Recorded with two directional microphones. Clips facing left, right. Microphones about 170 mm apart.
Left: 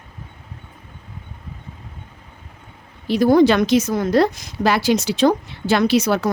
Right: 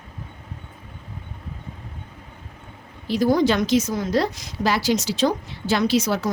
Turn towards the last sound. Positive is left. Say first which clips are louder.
# left 4 dB
turn(degrees=60)  # may be behind; listen again after turning